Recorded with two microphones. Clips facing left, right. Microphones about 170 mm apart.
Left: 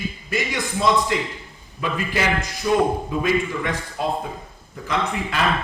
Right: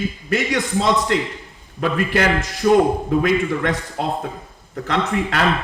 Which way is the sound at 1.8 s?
60° right (ahead or behind).